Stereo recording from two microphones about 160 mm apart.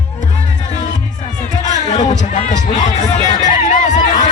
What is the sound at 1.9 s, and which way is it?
Music, 45° left (ahead or behind).